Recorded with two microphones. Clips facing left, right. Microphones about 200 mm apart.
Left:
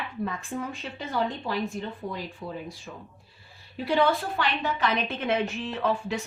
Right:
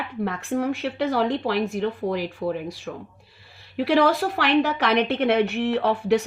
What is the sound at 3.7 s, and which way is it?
A woman's voice, 85° right.